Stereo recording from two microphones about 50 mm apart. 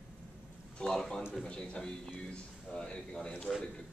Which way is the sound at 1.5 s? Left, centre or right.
Centre.